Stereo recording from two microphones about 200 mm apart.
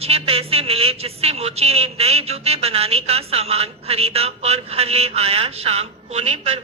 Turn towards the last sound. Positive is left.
turn(degrees=-30)  # may be behind; listen again after turning